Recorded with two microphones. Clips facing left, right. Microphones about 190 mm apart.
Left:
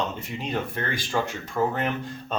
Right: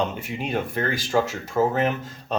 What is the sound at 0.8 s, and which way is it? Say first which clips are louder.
Speech: right 5 dB; 45° right (ahead or behind).